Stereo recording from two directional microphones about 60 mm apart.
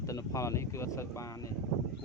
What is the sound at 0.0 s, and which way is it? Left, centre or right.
Speech, left.